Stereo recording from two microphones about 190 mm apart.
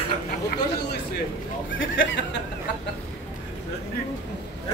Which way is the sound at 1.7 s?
80° left.